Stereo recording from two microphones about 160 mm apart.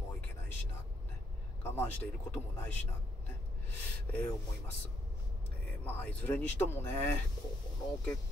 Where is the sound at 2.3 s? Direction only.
10° left (ahead or behind).